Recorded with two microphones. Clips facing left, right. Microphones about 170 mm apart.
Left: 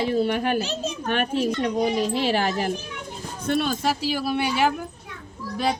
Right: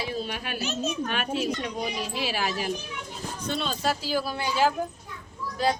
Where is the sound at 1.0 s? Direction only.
55° left (ahead or behind); by 4.6 s 70° left (ahead or behind).